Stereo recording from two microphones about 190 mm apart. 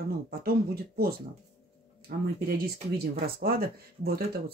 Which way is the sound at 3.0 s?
55° right (ahead or behind).